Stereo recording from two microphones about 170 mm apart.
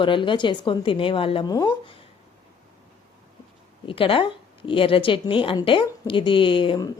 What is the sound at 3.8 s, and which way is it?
Speech, 30° left (ahead or behind).